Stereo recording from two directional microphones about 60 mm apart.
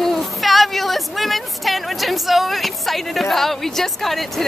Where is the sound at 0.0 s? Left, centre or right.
Centre.